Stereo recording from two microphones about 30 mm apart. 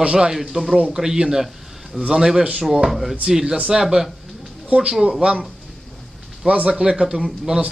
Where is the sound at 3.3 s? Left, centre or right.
Centre.